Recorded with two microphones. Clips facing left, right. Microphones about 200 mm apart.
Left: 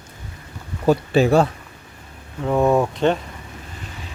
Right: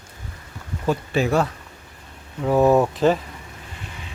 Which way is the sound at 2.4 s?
5° right (ahead or behind).